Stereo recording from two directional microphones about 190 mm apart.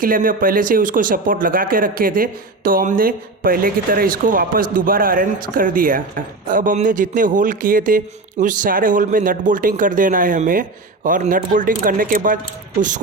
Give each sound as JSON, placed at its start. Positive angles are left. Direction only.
{"t": 0.0, "sound": "speech", "side_deg": -45}